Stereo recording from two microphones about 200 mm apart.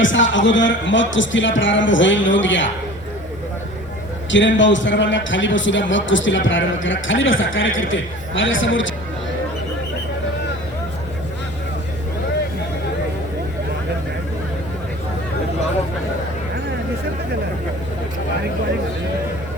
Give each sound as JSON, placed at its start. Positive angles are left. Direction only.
{"t": 0.0, "sound": "a man's voice", "side_deg": 70}
{"t": 4.3, "sound": "a man's voice", "side_deg": 65}